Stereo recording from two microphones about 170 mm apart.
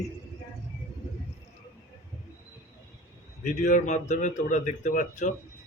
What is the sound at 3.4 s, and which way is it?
A man's voice, 45° left (ahead or behind).